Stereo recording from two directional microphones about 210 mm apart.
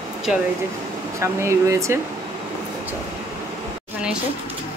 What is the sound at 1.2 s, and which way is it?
Speech, 15° right (ahead or behind).